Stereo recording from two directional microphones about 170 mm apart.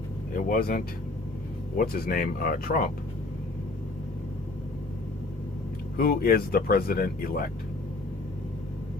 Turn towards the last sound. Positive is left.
turn(degrees=60)  # may be behind; listen again after turning